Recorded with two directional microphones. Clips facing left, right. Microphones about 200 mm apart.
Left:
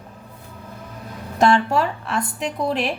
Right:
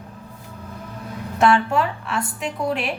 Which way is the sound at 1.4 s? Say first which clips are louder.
Left 1 dB; 35° left (ahead or behind).